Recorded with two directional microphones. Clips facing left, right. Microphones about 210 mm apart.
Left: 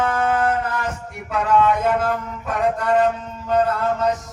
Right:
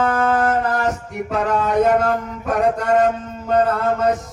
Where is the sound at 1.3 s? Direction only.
40° right (ahead or behind).